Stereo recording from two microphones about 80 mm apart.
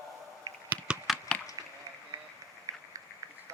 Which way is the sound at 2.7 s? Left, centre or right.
Right.